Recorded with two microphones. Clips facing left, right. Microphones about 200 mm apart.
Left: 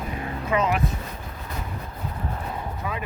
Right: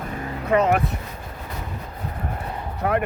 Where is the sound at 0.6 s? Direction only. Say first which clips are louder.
Right 3 dB; 65° right (ahead or behind).